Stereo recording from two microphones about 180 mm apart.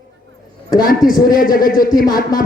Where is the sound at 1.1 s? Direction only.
55° left (ahead or behind).